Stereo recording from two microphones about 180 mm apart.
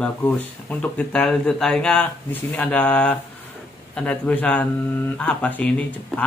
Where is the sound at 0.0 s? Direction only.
10° left (ahead or behind).